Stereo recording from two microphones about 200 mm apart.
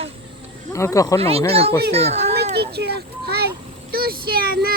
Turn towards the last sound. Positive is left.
turn(degrees=-45)  # may be behind; listen again after turning